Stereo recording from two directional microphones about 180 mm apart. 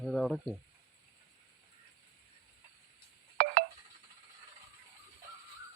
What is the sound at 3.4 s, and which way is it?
Telephone dialing, 55° right (ahead or behind).